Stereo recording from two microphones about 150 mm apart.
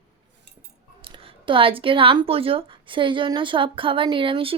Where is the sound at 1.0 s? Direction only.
35° right (ahead or behind).